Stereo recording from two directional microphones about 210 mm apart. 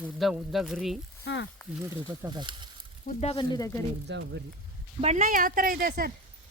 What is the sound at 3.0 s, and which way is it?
Speech, 25° left (ahead or behind).